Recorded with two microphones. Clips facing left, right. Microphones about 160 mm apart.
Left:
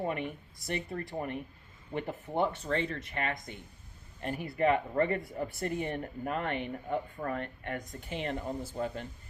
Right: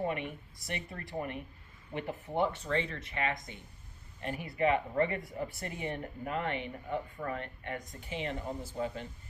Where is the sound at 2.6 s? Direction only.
45° left (ahead or behind).